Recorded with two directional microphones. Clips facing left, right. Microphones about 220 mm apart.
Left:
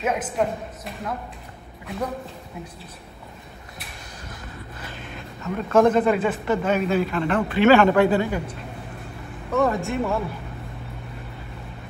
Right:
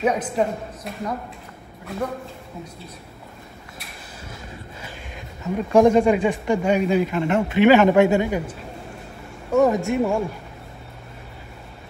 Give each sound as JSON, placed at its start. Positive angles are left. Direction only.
{"t": 0.0, "sound": "speech", "side_deg": 0}
{"t": 4.3, "sound": "a sound", "side_deg": -10}
{"t": 6.4, "sound": "a man's voice", "side_deg": -15}
{"t": 9.5, "sound": "a man's voice", "side_deg": -15}